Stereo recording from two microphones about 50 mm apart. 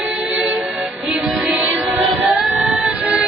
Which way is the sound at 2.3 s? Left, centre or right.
Centre.